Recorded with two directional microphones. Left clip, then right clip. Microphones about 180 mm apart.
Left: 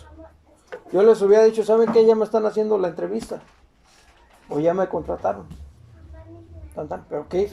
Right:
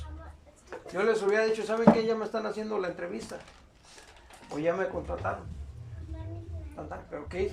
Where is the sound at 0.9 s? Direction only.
40° left (ahead or behind).